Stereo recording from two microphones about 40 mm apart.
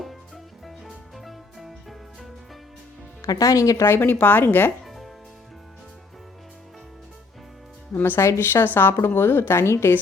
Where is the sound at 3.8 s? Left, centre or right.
Left.